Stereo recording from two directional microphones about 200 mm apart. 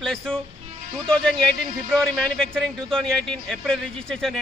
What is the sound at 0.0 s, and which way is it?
A man's voice, 5° left (ahead or behind).